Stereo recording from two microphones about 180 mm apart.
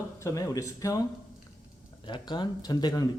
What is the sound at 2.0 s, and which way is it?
Speech, 25° left (ahead or behind).